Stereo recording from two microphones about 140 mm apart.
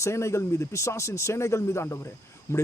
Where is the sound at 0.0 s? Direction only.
20° left (ahead or behind).